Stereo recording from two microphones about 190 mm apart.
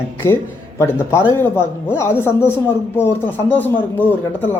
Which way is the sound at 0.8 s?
15° left (ahead or behind).